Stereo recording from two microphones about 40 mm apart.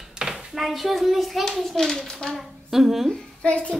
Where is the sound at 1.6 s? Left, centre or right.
Centre.